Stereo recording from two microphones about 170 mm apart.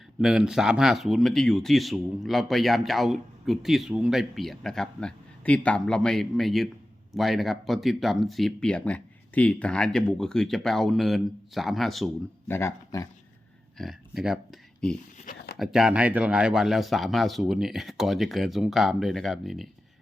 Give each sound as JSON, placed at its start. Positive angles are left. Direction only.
{"t": 0.2, "sound": "speech", "side_deg": -5}
{"t": 12.5, "sound": "speech", "side_deg": 15}
{"t": 13.7, "sound": "speech", "side_deg": 0}
{"t": 15.5, "sound": "speech", "side_deg": 0}